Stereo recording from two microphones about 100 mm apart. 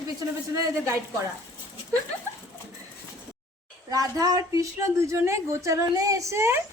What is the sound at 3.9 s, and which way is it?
Speech, 35° right (ahead or behind).